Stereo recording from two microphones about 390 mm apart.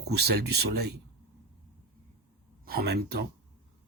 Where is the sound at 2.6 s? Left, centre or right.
Right.